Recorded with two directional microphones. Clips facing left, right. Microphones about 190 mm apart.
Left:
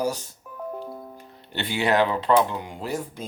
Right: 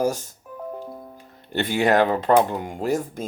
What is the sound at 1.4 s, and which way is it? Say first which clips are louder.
Speech: right 5 dB; 45° right (ahead or behind).